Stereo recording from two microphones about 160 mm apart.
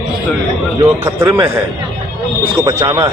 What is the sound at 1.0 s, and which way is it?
Speech, 15° right (ahead or behind).